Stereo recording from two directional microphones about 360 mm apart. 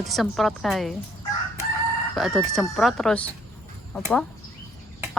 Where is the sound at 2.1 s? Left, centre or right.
Centre.